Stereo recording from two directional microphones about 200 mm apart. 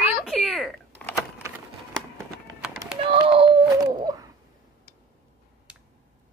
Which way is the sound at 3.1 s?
30° right (ahead or behind).